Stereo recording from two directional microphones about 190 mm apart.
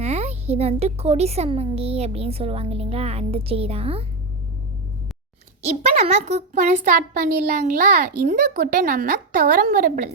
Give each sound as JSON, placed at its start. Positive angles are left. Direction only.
{"t": 0.0, "sound": "a child's voice", "side_deg": -35}
{"t": 6.0, "sound": "a child's voice", "side_deg": -35}